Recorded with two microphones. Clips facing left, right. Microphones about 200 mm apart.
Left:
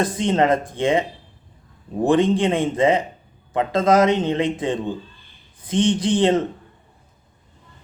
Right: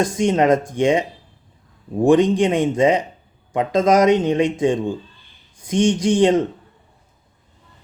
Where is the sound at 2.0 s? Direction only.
15° right (ahead or behind).